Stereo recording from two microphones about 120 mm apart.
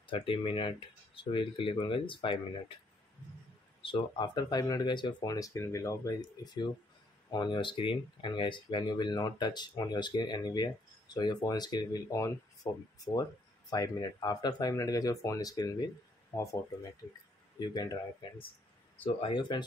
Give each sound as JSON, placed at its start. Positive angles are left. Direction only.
{"t": 0.0, "sound": "speech", "side_deg": 45}
{"t": 3.8, "sound": "speech", "side_deg": 40}
{"t": 16.3, "sound": "speech", "side_deg": 15}
{"t": 17.6, "sound": "speech", "side_deg": 35}
{"t": 19.2, "sound": "speech", "side_deg": 40}